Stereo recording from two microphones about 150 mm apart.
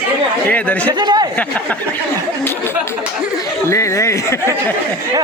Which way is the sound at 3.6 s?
20° left (ahead or behind).